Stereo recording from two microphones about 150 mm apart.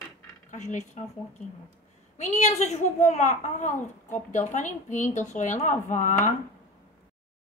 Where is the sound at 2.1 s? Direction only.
50° left (ahead or behind).